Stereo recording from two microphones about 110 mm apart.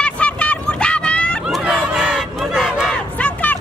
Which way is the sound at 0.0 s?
10° left (ahead or behind).